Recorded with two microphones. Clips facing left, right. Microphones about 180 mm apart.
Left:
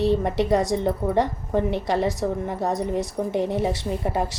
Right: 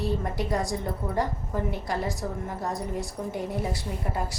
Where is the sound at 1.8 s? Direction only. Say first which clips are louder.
Left 7 dB; 75° left (ahead or behind).